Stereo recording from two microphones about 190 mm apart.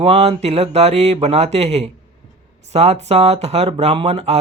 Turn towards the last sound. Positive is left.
turn(degrees=-30)  # may be behind; listen again after turning